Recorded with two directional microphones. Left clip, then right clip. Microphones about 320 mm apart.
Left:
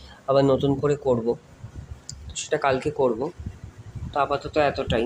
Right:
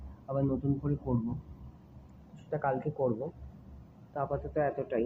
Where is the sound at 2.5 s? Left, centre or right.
Left.